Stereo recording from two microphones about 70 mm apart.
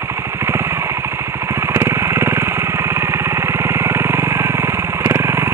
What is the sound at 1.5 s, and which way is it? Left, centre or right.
Vehicle, right.